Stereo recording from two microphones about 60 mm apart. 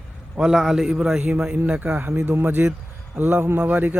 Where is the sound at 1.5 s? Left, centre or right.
Right.